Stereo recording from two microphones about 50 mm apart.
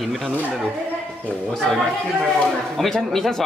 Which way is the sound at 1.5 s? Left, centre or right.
Centre.